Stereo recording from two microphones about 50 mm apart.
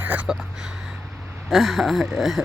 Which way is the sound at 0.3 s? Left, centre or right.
Centre.